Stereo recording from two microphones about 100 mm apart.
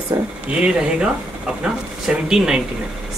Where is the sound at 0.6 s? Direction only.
10° right (ahead or behind).